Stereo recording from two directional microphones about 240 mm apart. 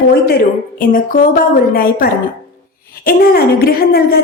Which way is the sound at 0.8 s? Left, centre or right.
Left.